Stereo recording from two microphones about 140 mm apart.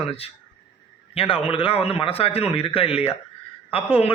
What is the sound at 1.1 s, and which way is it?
A man's voice, 45° left (ahead or behind).